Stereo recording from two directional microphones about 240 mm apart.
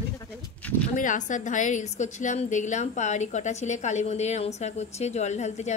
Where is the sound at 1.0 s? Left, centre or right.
Left.